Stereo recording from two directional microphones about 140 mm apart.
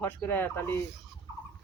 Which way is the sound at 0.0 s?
15° left (ahead or behind).